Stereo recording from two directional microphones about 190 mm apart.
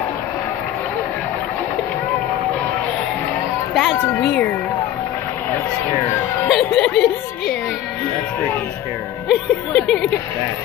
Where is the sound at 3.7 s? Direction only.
Centre (ahead or behind).